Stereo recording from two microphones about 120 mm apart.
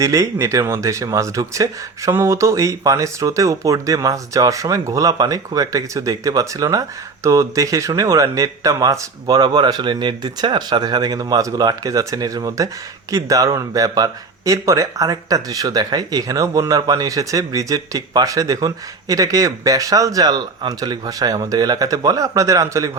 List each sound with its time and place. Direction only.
0.0 s speech: 25° right (ahead or behind)